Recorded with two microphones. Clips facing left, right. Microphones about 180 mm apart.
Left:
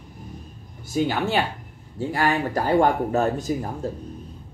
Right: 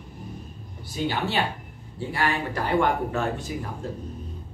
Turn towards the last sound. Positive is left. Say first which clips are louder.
# left 5 dB
turn(degrees=40)  # may be behind; listen again after turning